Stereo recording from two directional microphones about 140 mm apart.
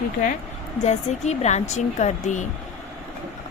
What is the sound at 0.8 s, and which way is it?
Speech, 55° left (ahead or behind).